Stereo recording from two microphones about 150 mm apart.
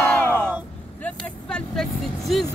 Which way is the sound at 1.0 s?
5° left (ahead or behind).